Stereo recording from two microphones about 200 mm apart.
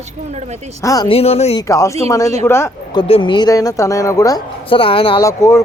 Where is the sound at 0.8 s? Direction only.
15° left (ahead or behind).